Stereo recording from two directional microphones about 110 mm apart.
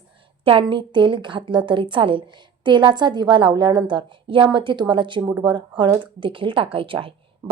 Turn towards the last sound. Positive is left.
turn(degrees=-55)  # may be behind; listen again after turning